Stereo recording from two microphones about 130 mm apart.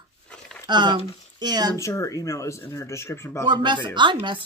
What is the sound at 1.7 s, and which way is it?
Speech, 25° left (ahead or behind).